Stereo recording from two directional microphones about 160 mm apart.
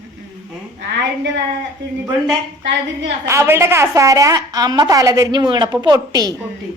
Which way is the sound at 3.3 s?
15° right (ahead or behind).